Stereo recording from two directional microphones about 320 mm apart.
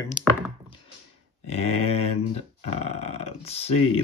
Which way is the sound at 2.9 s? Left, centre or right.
Centre.